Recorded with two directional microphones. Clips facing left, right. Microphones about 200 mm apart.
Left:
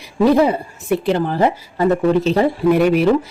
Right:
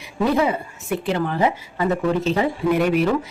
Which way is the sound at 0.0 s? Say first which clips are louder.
Left 6 dB; 35° left (ahead or behind).